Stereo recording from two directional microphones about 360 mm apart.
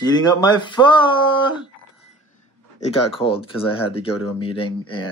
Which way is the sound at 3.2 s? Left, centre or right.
Centre.